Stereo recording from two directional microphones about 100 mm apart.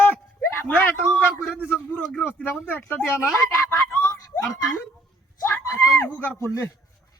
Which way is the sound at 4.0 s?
30° left (ahead or behind).